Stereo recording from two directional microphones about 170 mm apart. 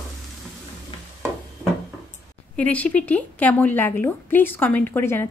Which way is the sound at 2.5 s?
10° left (ahead or behind).